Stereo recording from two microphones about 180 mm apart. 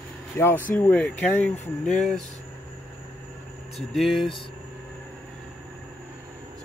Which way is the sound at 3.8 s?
Centre (ahead or behind).